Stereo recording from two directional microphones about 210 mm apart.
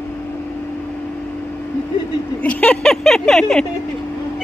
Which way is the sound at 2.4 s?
5° left (ahead or behind).